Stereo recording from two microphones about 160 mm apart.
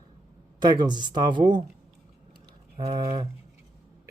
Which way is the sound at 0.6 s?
25° right (ahead or behind).